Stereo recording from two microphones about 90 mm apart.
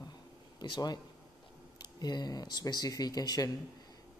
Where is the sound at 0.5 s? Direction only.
55° left (ahead or behind).